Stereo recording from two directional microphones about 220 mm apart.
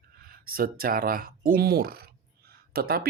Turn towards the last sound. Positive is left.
turn(degrees=-45)  # may be behind; listen again after turning